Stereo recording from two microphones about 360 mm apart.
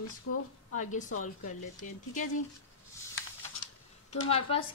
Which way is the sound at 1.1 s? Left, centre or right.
Left.